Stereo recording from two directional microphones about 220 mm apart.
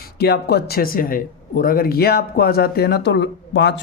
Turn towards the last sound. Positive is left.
turn(degrees=50)  # may be behind; listen again after turning